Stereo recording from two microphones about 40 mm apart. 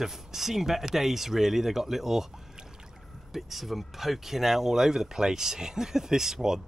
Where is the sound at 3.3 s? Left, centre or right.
Centre.